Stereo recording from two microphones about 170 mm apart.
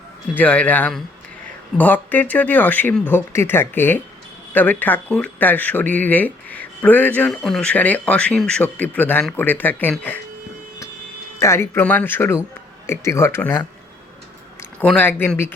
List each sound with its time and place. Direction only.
0.3 s speech: 10° left (ahead or behind)
11.3 s speech: 15° left (ahead or behind)
14.8 s speech: 10° left (ahead or behind)